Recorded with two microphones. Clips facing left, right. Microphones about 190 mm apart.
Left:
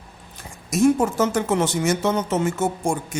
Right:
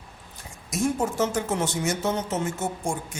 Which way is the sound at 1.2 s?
75° left (ahead or behind).